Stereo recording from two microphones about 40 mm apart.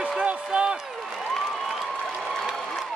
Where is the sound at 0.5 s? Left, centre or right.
Right.